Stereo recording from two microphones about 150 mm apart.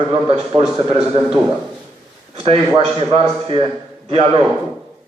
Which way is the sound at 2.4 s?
40° right (ahead or behind).